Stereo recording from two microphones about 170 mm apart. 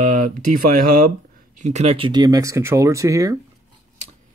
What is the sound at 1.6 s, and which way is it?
Speech, 40° right (ahead or behind).